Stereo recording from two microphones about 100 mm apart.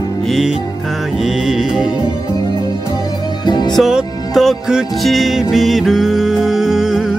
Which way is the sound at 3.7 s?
Centre (ahead or behind).